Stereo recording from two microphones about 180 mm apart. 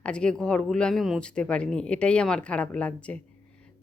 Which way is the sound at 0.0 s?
5° left (ahead or behind).